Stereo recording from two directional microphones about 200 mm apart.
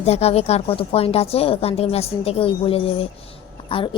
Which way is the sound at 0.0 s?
30° left (ahead or behind).